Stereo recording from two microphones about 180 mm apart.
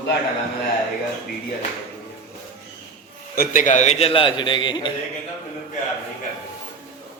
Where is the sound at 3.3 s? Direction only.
50° left (ahead or behind); by 4.9 s 25° left (ahead or behind).